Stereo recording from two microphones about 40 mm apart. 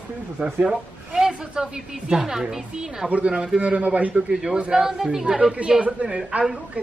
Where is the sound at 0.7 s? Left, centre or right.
Centre.